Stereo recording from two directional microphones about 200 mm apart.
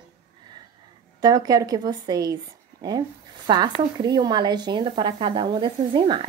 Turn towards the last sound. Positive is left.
turn(degrees=-25)  # may be behind; listen again after turning